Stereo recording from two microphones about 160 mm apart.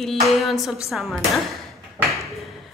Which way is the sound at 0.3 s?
Centre (ahead or behind).